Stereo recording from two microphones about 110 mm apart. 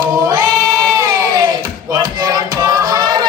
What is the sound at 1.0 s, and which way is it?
Music, 35° right (ahead or behind).